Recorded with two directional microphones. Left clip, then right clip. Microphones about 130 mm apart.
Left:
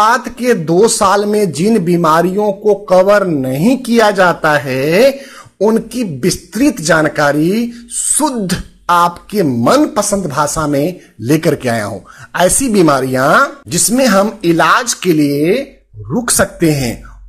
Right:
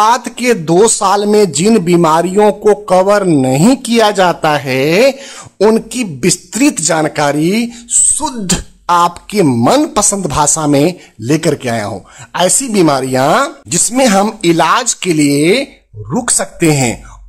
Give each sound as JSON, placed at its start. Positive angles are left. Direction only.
{"t": 0.0, "sound": "speech", "side_deg": -20}
{"t": 2.4, "sound": "speech", "side_deg": -35}
{"t": 9.8, "sound": "speech", "side_deg": -30}
{"t": 11.2, "sound": "a woman's voice", "side_deg": -5}